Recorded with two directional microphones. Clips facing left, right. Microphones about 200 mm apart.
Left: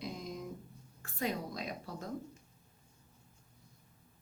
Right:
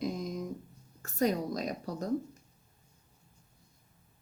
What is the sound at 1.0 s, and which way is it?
A woman's voice, 45° right (ahead or behind).